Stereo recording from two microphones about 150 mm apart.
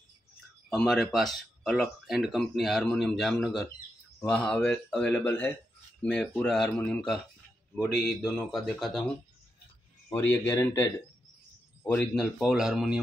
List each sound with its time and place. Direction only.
0.7 s a man's voice: centre (ahead or behind)
10.0 s a man's voice: 15° left (ahead or behind)
12.2 s speech: centre (ahead or behind)